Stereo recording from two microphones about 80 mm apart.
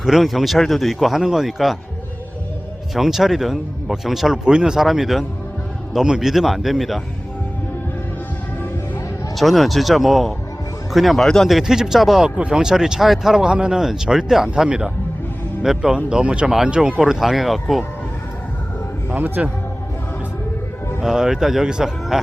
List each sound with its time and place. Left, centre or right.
0.0 s speech: centre
2.9 s speech: centre
9.3 s speech: centre
19.1 s a man's voice: right
21.0 s speech: centre